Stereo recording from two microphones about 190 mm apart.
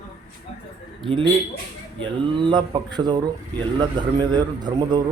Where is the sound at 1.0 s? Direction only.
25° right (ahead or behind).